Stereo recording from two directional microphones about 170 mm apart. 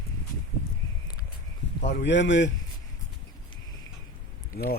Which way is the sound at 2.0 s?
90° left.